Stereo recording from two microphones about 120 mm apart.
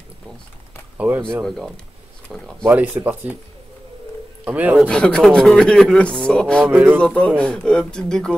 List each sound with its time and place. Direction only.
0.9 s speech: 15° right (ahead or behind)
2.2 s speech: 10° left (ahead or behind)
2.6 s speech: 15° right (ahead or behind)
4.5 s speech: 15° right (ahead or behind)
4.8 s speech: 10° left (ahead or behind)
6.7 s speech: 15° right (ahead or behind)
7.0 s speech: 5° left (ahead or behind)